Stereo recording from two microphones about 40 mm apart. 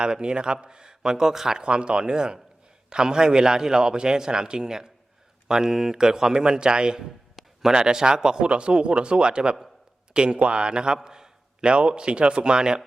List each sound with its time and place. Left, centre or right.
0.0 s a man's voice: right
1.6 s a man's voice: right